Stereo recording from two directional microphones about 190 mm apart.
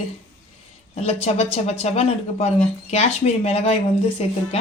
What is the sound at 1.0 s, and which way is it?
Speech, 35° left (ahead or behind).